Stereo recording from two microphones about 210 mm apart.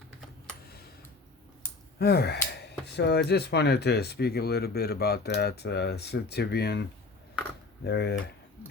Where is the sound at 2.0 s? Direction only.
50° left (ahead or behind).